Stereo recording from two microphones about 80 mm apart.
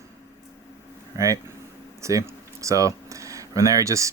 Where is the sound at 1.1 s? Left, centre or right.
Right.